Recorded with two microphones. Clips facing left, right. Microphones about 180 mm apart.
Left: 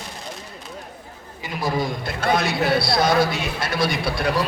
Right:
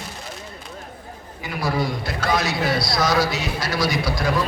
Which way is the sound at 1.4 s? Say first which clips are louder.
Even; 20° left (ahead or behind).